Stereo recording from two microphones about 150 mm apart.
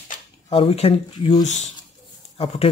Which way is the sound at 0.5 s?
40° left (ahead or behind).